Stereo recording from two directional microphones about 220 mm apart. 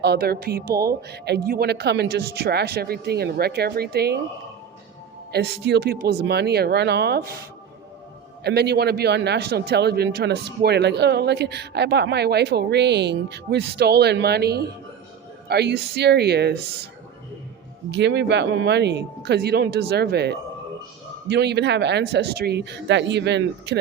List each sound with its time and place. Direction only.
0.0 s speech: 45° right (ahead or behind)
5.3 s speech: 50° right (ahead or behind)
8.4 s speech: 50° right (ahead or behind)
17.9 s speech: 50° right (ahead or behind)